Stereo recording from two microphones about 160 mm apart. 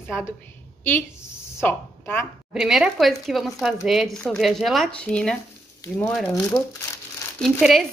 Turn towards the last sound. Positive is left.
turn(degrees=0)  # may be behind; listen again after turning